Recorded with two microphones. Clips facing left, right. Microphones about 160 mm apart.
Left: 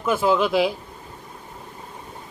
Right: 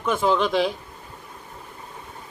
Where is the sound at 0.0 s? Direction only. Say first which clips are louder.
Left 1 dB; 5° left (ahead or behind).